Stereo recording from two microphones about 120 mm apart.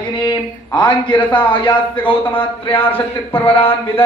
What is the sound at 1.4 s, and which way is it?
Speech, 45° left (ahead or behind).